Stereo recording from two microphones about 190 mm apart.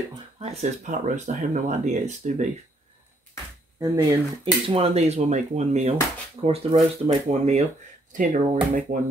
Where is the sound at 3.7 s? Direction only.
15° right (ahead or behind).